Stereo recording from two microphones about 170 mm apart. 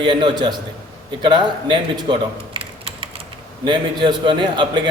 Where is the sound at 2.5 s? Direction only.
30° right (ahead or behind).